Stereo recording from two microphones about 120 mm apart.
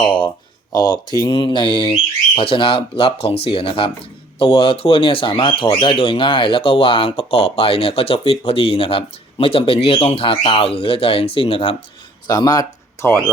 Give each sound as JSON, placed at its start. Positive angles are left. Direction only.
{"t": 0.0, "sound": "speech", "side_deg": 45}
{"t": 12.3, "sound": "speech", "side_deg": 35}